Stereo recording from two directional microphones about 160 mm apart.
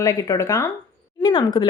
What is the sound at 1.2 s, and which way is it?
Speech, 30° left (ahead or behind).